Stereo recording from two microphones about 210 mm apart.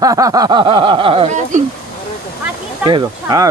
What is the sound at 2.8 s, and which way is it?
Speech, 20° right (ahead or behind).